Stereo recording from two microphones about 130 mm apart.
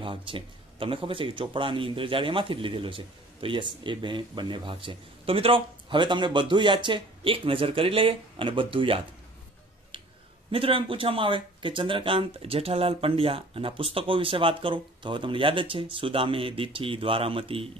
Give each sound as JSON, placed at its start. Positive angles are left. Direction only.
{"t": 0.0, "sound": "speech", "side_deg": -40}
{"t": 10.5, "sound": "speech", "side_deg": -45}